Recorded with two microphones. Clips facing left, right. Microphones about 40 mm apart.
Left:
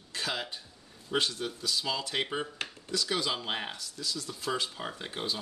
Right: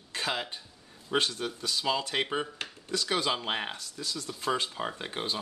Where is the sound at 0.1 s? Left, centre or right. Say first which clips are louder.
Right 2 dB; right.